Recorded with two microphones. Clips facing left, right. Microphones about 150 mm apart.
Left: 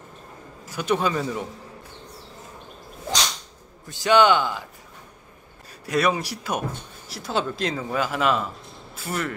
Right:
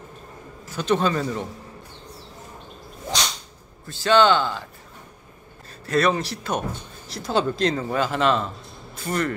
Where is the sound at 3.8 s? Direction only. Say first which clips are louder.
Even; 15° left (ahead or behind).